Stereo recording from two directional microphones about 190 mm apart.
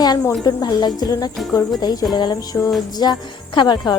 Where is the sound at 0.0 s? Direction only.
20° left (ahead or behind).